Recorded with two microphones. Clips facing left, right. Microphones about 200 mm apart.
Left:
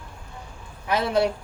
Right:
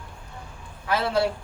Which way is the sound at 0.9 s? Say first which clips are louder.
Left 1 dB; 20° left (ahead or behind).